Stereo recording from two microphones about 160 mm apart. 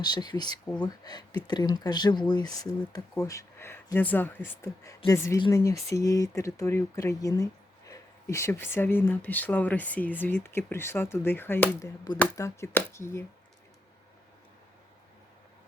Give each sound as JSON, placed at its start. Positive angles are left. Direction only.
{"t": 0.0, "sound": "speech", "side_deg": 25}